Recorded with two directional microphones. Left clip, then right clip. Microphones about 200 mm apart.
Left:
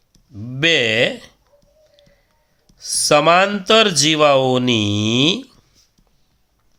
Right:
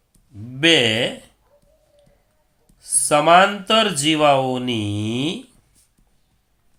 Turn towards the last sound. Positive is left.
turn(degrees=50)  # may be behind; listen again after turning